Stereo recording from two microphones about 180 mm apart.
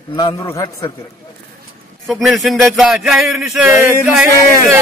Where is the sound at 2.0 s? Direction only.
Centre (ahead or behind).